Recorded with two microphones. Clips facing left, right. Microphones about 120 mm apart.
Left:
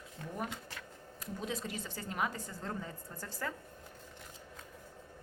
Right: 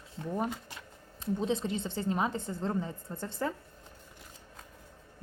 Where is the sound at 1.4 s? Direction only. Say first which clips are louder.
Right 7 dB; 25° right (ahead or behind).